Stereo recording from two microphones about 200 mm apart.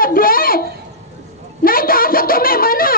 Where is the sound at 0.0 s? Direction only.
45° left (ahead or behind).